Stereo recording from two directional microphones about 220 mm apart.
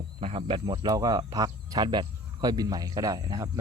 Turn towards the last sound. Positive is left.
turn(degrees=-15)  # may be behind; listen again after turning